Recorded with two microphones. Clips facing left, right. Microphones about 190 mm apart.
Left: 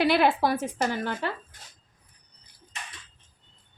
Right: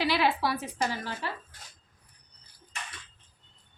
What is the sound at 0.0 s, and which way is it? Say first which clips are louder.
Speech: left 5 dB; 55° left (ahead or behind).